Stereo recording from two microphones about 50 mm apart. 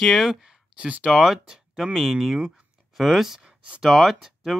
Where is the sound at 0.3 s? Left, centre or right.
Centre.